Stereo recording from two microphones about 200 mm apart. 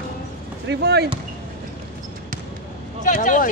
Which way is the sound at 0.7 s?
55° right (ahead or behind).